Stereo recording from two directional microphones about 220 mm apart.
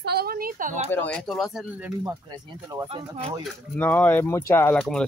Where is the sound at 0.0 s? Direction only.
45° right (ahead or behind).